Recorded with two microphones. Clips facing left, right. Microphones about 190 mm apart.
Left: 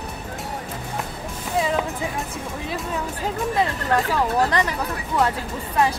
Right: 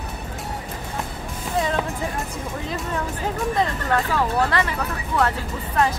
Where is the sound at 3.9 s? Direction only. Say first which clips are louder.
Left 1 dB; 15° left (ahead or behind).